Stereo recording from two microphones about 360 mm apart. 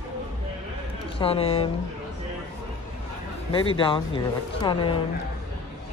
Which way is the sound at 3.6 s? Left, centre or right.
Centre.